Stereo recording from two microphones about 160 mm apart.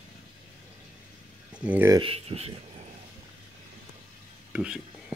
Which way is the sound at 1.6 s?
10° right (ahead or behind).